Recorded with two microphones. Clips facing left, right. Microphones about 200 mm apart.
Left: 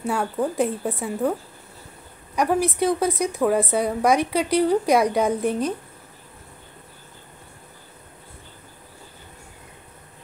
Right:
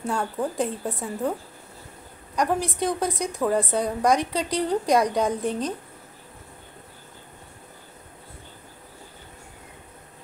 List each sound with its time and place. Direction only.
0.0 s a woman's voice: 10° left (ahead or behind)
2.3 s a woman's voice: 10° left (ahead or behind)